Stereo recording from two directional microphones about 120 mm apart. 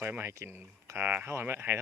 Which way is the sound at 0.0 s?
20° right (ahead or behind).